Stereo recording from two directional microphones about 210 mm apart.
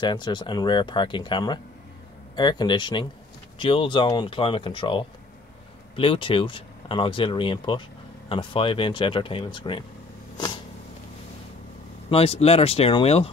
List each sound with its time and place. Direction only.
0.0 s speech: 20° left (ahead or behind)
10.3 s vehicle: 20° left (ahead or behind)
12.1 s speech: 30° left (ahead or behind)